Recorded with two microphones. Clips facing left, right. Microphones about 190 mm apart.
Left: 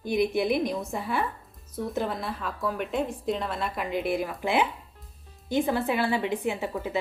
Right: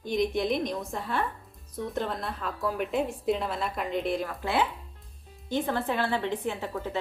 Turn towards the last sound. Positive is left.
turn(degrees=10)  # may be behind; listen again after turning